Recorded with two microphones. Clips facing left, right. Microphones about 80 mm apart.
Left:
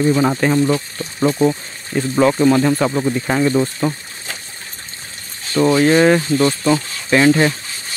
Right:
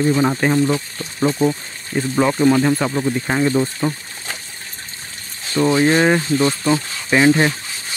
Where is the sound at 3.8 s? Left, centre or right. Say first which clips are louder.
Left 2 dB; centre.